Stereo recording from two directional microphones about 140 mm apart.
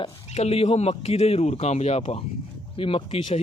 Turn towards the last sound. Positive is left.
turn(degrees=45)  # may be behind; listen again after turning